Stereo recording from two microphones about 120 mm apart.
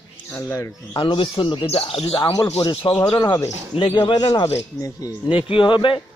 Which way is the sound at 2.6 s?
40° left (ahead or behind).